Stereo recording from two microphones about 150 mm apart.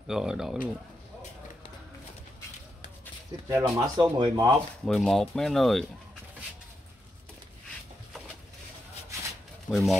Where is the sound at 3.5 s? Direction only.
15° right (ahead or behind).